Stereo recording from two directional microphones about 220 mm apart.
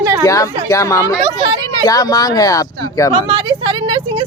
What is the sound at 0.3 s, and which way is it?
Speech, 15° left (ahead or behind).